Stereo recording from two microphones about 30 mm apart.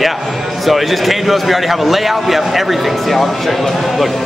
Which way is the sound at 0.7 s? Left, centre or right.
Centre.